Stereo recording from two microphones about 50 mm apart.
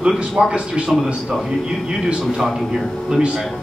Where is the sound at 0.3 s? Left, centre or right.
Centre.